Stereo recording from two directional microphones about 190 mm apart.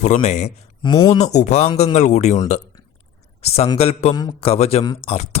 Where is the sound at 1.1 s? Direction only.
35° left (ahead or behind).